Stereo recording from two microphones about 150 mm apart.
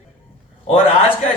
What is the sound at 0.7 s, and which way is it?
Speech, 40° left (ahead or behind).